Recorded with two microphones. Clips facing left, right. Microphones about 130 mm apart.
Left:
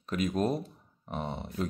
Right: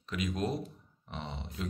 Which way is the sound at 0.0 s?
45° left (ahead or behind).